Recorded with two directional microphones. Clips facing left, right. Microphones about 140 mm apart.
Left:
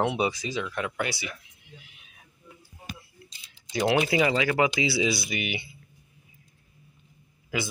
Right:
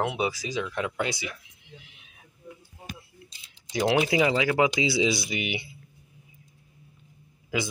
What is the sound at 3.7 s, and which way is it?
Speech, 10° right (ahead or behind).